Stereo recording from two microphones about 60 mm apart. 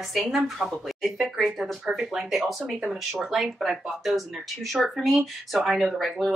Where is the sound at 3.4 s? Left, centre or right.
Centre.